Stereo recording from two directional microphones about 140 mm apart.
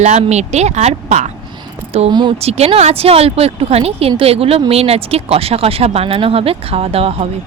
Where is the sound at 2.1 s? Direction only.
30° right (ahead or behind).